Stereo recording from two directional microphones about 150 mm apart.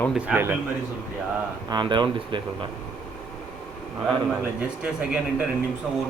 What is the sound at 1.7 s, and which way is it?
Speech, 30° right (ahead or behind).